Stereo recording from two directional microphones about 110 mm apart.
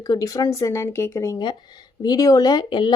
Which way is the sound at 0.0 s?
35° left (ahead or behind).